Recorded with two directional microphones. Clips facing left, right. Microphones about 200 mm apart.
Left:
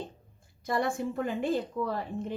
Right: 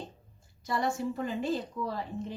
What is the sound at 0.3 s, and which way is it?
A woman's voice, 55° left (ahead or behind).